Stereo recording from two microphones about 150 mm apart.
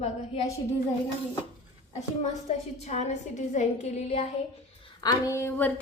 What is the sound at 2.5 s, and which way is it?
A woman's voice, 50° left (ahead or behind).